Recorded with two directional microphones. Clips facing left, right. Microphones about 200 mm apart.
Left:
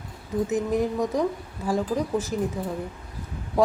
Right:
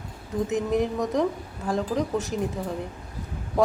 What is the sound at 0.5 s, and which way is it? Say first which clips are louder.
A woman's voice: even; centre (ahead or behind).